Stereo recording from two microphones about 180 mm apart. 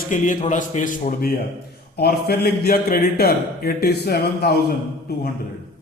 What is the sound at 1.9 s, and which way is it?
Speech, 60° left (ahead or behind).